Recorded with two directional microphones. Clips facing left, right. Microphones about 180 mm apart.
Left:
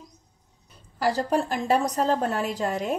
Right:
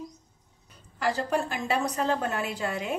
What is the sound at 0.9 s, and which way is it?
A woman's voice, 35° left (ahead or behind).